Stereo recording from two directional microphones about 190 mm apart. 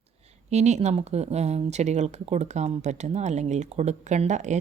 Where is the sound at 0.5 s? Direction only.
35° right (ahead or behind).